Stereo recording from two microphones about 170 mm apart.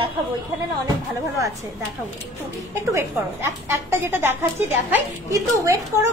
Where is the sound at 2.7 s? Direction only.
15° right (ahead or behind).